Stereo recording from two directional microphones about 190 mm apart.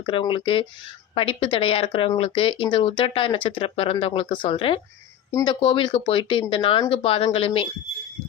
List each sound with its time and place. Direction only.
0.0 s speech: 25° left (ahead or behind)